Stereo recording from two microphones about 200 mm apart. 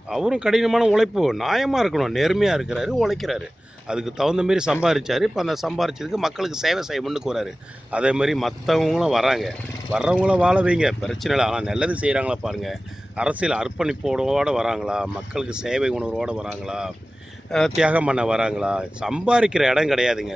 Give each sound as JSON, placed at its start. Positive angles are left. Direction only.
{"t": 0.1, "sound": "speech", "side_deg": -5}